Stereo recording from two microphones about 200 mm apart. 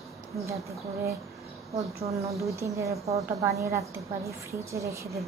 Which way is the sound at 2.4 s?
15° right (ahead or behind).